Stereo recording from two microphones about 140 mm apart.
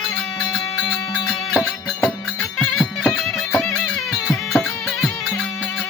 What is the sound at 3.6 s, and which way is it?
Music, 20° left (ahead or behind).